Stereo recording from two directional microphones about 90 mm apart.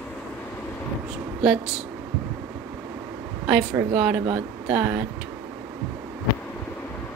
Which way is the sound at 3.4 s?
15° right (ahead or behind).